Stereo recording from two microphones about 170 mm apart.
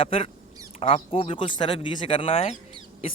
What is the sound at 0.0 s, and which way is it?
Speech, 35° left (ahead or behind).